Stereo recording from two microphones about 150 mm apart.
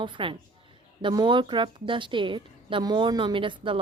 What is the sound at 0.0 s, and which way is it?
A woman's voice, 35° right (ahead or behind).